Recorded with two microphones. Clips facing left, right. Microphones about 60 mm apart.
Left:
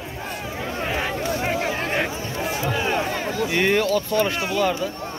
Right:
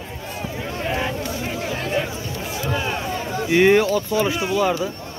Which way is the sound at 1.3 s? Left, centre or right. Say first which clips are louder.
Left 3 dB; left.